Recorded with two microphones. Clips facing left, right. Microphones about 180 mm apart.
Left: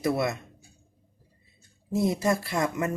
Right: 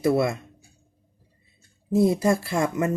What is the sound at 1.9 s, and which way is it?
Speech, 25° right (ahead or behind).